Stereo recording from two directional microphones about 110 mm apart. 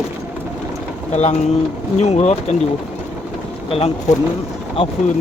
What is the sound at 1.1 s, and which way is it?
Speech, 90° left.